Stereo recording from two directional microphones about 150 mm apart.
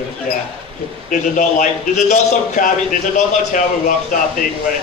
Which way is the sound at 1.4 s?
55° left (ahead or behind).